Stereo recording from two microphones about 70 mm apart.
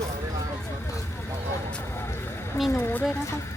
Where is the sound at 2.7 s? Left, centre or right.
Left.